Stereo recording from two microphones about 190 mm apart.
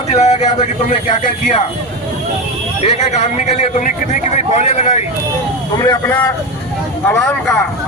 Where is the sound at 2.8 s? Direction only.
35° left (ahead or behind).